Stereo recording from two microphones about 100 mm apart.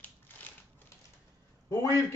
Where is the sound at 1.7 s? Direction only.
30° left (ahead or behind).